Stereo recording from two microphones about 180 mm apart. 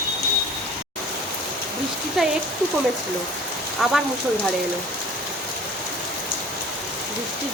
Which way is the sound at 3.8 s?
Centre (ahead or behind).